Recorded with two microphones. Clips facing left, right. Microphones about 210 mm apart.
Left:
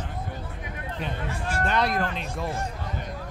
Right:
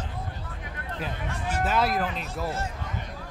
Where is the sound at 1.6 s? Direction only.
5° right (ahead or behind).